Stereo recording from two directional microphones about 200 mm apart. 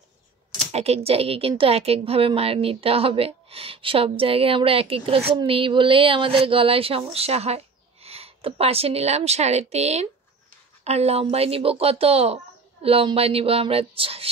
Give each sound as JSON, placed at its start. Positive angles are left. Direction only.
{"t": 0.7, "sound": "speech", "side_deg": -30}